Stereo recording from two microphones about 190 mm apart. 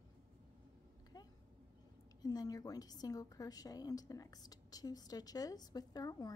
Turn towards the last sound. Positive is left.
turn(degrees=20)  # may be behind; listen again after turning